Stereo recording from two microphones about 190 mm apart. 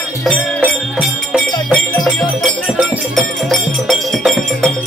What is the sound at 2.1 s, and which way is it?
Speech, 5° left (ahead or behind).